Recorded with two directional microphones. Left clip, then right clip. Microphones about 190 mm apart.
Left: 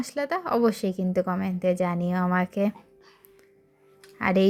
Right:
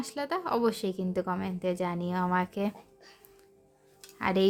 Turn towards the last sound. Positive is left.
turn(degrees=20)  # may be behind; listen again after turning